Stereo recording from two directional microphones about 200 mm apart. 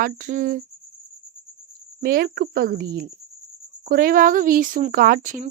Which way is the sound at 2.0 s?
45° right (ahead or behind).